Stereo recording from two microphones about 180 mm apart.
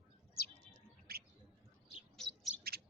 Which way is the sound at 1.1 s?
60° right (ahead or behind).